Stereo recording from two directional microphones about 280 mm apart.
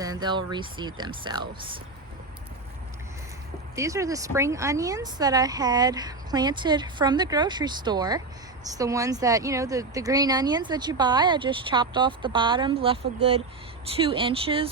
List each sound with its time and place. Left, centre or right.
0.0 s a woman's voice: centre
3.8 s a woman's voice: centre